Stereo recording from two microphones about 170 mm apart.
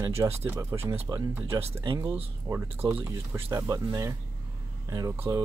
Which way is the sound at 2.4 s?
10° right (ahead or behind).